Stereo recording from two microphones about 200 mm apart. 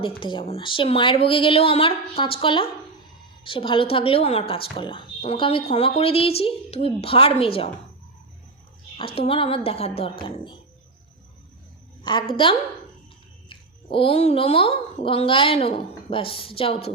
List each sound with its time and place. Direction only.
0.2 s speech: 25° left (ahead or behind)
9.0 s speech: 25° left (ahead or behind)
12.0 s speech: 25° left (ahead or behind)